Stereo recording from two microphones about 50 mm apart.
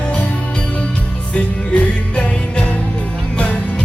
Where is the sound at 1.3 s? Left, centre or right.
Left.